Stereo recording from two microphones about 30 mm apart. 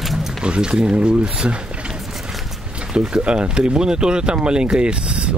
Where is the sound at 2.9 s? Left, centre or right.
Right.